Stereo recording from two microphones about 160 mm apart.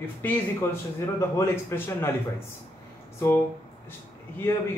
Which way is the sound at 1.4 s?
15° left (ahead or behind).